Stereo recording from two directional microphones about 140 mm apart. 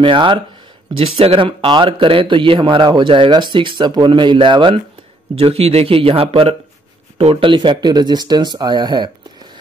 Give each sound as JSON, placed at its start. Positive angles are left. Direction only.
{"t": 0.0, "sound": "speech", "side_deg": -35}